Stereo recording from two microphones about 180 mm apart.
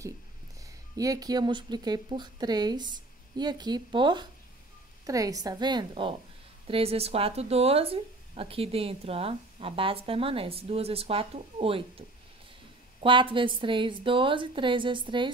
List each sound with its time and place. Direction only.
0.9 s speech: 20° right (ahead or behind)
13.0 s speech: 30° right (ahead or behind)